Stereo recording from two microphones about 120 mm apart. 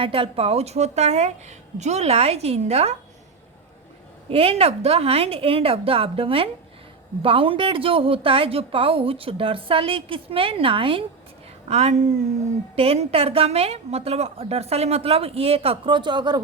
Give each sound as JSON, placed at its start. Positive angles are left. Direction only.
{"t": 0.0, "sound": "a woman's voice", "side_deg": -50}
{"t": 4.3, "sound": "a woman's voice", "side_deg": -55}
{"t": 11.7, "sound": "a woman's voice", "side_deg": -65}
{"t": 12.7, "sound": "a woman's voice", "side_deg": -55}